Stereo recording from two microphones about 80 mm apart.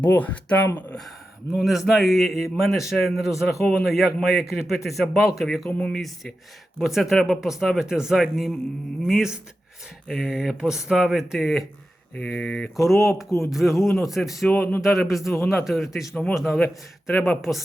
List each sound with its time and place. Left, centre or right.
0.0 s speech: left
1.5 s a man's voice: centre
5.7 s speech: centre
6.7 s a man's voice: centre
12.1 s a man's voice: centre
14.5 s speech: left
14.8 s a man's voice: centre